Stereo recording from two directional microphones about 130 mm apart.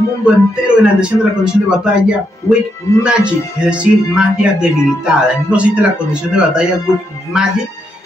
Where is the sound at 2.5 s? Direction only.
20° left (ahead or behind).